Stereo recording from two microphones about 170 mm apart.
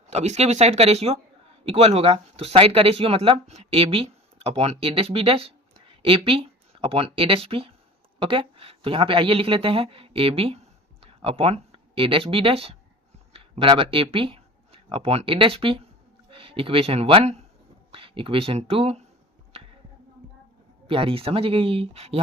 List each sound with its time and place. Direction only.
0.1 s speech: 40° right (ahead or behind)
20.8 s speech: 35° right (ahead or behind)